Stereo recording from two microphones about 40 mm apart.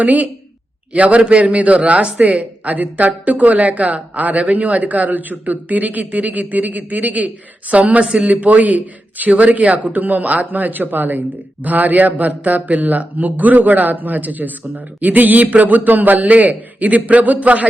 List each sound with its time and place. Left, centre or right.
0.0 s a woman's voice: right
8.0 s a man's voice: right
8.3 s speech: right